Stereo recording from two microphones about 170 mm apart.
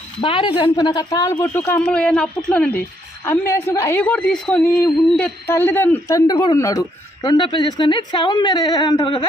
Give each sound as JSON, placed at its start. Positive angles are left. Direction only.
{"t": 0.2, "sound": "a woman's voice", "side_deg": 30}